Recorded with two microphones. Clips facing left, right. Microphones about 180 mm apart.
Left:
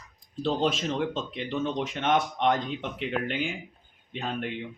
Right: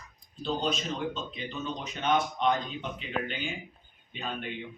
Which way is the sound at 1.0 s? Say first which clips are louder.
Left 4 dB; 80° left.